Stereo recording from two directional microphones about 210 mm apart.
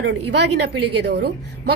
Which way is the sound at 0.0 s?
55° right (ahead or behind).